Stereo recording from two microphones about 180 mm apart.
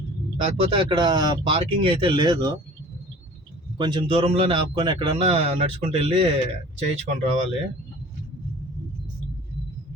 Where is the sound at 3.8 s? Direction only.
25° right (ahead or behind).